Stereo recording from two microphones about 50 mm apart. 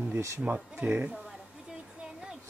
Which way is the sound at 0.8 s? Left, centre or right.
Right.